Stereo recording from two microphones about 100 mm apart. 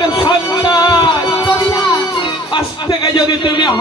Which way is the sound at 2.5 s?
45° left (ahead or behind).